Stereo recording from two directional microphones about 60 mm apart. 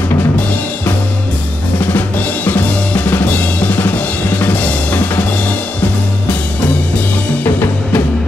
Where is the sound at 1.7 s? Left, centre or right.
Left.